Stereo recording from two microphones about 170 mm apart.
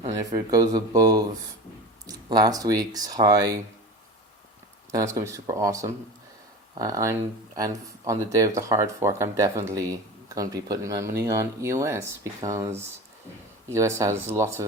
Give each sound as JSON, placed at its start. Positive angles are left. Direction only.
{"t": 0.5, "sound": "speech", "side_deg": -20}
{"t": 4.9, "sound": "speech", "side_deg": -20}